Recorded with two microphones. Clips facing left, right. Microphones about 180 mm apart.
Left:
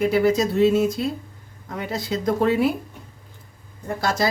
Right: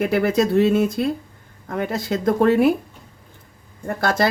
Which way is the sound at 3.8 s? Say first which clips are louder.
Right 3 dB; 60° right (ahead or behind).